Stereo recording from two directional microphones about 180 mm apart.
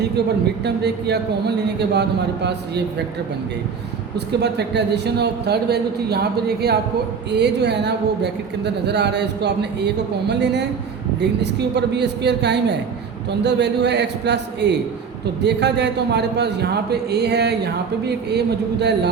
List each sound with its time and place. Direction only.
0.6 s speech: 70° right (ahead or behind)
4.3 s a man's voice: 70° right (ahead or behind)
11.7 s speech: 70° right (ahead or behind)